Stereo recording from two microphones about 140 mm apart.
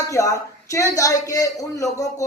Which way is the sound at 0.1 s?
20° left (ahead or behind).